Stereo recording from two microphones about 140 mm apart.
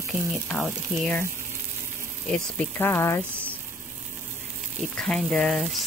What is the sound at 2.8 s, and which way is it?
Speech, 20° left (ahead or behind).